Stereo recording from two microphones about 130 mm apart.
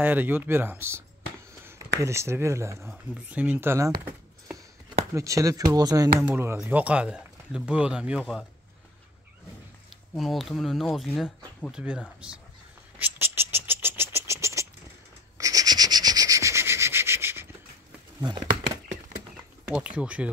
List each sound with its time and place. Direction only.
0.0 s speech: 15° right (ahead or behind)
2.9 s speech: 10° right (ahead or behind)
5.1 s speech: 25° right (ahead or behind)
6.2 s speech: 15° right (ahead or behind)
10.1 s speech: centre (ahead or behind)
13.0 s a sound: 15° right (ahead or behind)
15.3 s rub: 25° right (ahead or behind)
19.7 s speech: 10° right (ahead or behind)